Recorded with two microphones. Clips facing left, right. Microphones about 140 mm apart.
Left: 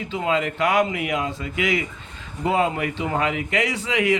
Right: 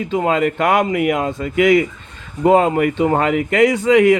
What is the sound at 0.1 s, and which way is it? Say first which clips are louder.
Speech: right 6 dB; 50° right (ahead or behind).